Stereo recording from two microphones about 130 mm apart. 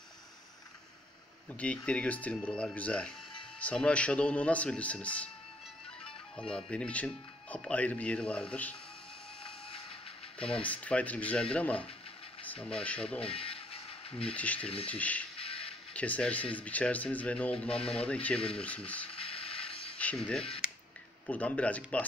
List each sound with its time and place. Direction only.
1.5 s speech: 10° left (ahead or behind)
6.5 s speech: 5° left (ahead or behind)
10.4 s speech: 45° left (ahead or behind)
10.7 s speech: 10° left (ahead or behind)
13.2 s a sound: 45° left (ahead or behind)
14.2 s speech: 10° left (ahead or behind)
15.3 s music: 45° left (ahead or behind)
15.9 s speech: 10° left (ahead or behind)
19.0 s music: 45° left (ahead or behind)
20.0 s speech: 10° left (ahead or behind)